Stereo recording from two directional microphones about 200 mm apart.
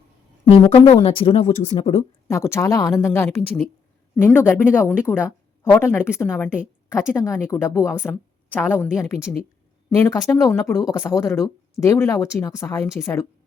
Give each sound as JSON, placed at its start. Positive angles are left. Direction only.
{"t": 0.5, "sound": "a woman's voice", "side_deg": 25}
{"t": 2.2, "sound": "speech", "side_deg": 15}